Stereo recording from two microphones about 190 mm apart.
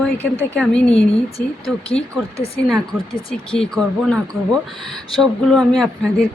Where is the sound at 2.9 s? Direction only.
5° right (ahead or behind).